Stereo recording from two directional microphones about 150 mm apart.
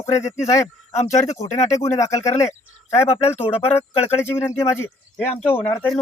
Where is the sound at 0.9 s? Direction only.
45° left (ahead or behind).